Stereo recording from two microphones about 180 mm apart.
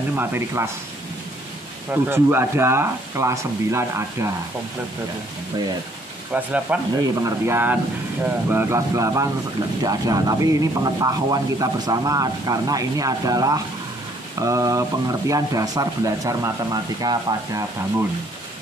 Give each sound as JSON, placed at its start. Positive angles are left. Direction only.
{"t": 0.1, "sound": "speech", "side_deg": -10}
{"t": 2.0, "sound": "speech", "side_deg": -10}
{"t": 6.3, "sound": "speech", "side_deg": -10}